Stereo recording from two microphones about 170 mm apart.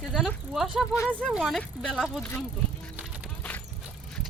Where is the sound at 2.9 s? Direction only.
5° right (ahead or behind).